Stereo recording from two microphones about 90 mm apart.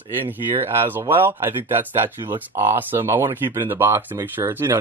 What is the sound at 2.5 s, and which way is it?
Speech, 25° right (ahead or behind).